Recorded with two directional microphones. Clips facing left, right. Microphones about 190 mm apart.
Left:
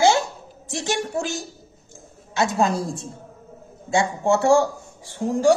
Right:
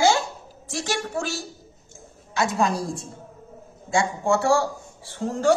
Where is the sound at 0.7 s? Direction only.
20° left (ahead or behind).